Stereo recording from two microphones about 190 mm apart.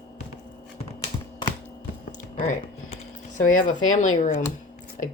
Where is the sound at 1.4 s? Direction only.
25° left (ahead or behind).